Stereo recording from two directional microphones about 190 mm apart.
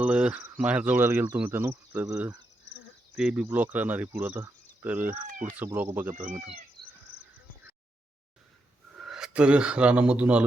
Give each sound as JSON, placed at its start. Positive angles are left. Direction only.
{"t": 0.0, "sound": "insect", "side_deg": -5}
{"t": 6.8, "sound": "a sound", "side_deg": 0}
{"t": 9.0, "sound": "speech", "side_deg": 0}